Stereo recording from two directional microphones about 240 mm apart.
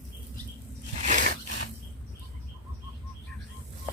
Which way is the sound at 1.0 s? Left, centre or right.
Right.